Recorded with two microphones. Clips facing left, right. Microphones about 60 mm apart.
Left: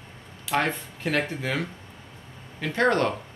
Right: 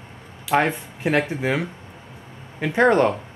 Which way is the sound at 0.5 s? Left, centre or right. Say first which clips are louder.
Right 5 dB; centre.